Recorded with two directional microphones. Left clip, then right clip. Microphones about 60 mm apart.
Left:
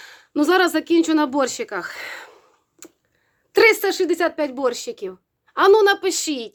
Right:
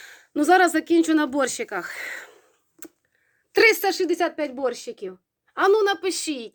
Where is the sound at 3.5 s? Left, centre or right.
Left.